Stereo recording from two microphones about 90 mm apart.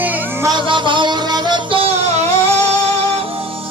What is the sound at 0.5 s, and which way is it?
Music, 65° right (ahead or behind).